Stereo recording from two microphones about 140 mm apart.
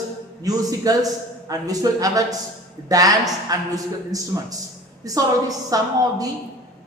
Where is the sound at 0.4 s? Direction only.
25° right (ahead or behind).